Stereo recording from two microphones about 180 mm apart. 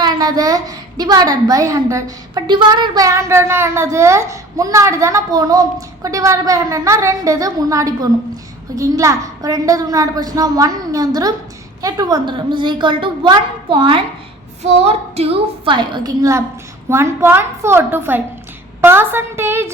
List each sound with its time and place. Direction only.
0.0 s a child's voice: 20° right (ahead or behind)